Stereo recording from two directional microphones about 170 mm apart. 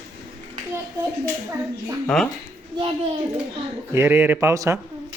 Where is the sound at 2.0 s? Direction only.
5° left (ahead or behind).